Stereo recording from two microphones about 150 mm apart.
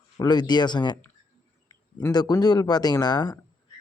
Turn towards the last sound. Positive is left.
turn(degrees=25)  # may be behind; listen again after turning